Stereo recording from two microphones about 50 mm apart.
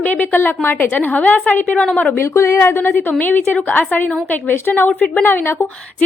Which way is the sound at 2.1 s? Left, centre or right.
Left.